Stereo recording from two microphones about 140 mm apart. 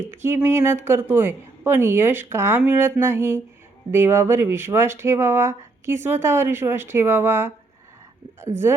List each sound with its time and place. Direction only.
0.1 s speech: 15° right (ahead or behind)